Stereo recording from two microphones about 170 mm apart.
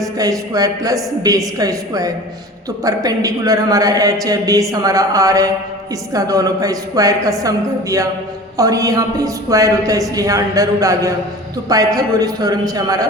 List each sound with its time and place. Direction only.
0.2 s a woman's voice: 20° right (ahead or behind)